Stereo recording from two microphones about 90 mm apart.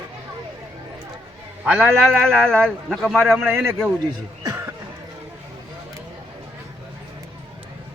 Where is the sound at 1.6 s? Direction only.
15° right (ahead or behind).